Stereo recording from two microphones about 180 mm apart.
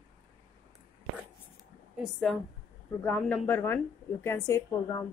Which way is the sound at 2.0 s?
Centre (ahead or behind).